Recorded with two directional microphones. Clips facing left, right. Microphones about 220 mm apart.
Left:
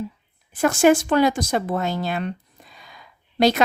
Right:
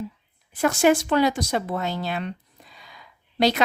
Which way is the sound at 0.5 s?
50° left (ahead or behind).